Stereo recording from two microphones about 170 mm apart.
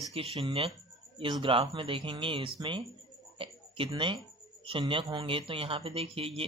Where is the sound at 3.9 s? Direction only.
30° right (ahead or behind).